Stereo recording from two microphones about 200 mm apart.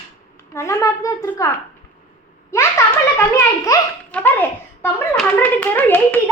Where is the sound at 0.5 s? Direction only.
15° left (ahead or behind).